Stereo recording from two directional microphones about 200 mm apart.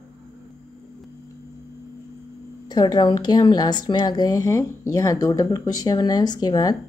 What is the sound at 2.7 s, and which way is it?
Speech, 20° left (ahead or behind).